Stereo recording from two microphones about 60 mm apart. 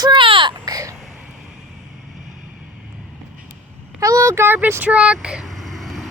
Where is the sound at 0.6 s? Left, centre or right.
Right.